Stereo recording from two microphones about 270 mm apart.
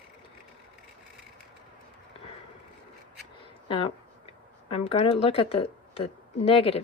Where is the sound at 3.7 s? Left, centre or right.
Centre.